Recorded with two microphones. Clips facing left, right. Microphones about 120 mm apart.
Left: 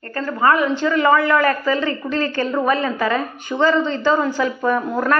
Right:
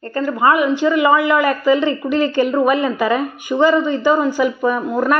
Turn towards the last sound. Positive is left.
turn(degrees=-10)  # may be behind; listen again after turning